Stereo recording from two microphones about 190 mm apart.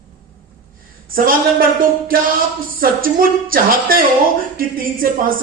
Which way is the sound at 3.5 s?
50° right (ahead or behind).